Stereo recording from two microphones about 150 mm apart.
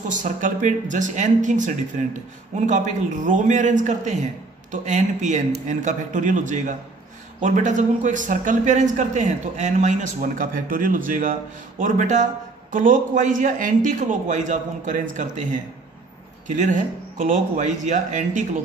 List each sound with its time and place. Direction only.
0.1 s speech: 55° right (ahead or behind)
16.4 s speech: 55° right (ahead or behind)